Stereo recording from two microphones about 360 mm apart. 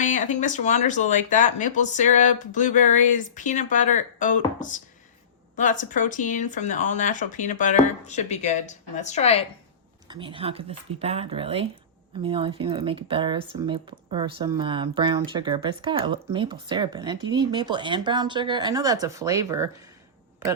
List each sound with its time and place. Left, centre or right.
0.0 s speech: left
10.1 s speech: centre